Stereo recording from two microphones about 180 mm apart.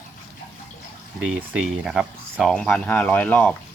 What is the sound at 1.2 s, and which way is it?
Speech, 5° right (ahead or behind).